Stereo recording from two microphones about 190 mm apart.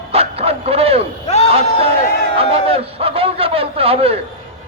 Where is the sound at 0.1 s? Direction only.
30° right (ahead or behind).